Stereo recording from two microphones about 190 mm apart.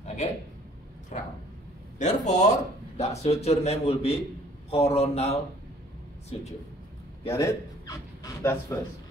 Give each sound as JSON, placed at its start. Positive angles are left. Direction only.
{"t": 0.0, "sound": "a sound", "side_deg": 35}
{"t": 1.1, "sound": "speech", "side_deg": 40}
{"t": 6.3, "sound": "speech", "side_deg": 30}
{"t": 7.2, "sound": "speech", "side_deg": 15}